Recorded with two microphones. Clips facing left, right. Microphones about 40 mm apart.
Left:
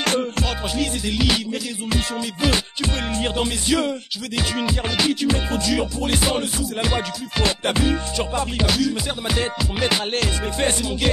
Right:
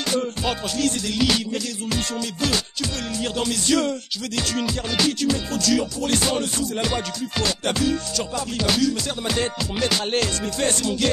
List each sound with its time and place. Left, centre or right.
0.0 s music: left
0.7 s music: centre
2.1 s music: left
3.3 s music: centre
8.6 s music: centre